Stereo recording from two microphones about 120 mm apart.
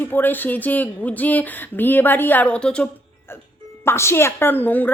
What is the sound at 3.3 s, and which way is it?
A woman's voice, 20° left (ahead or behind).